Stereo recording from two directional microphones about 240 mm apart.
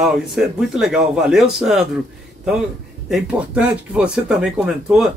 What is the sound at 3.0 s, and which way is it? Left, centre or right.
Speech, centre.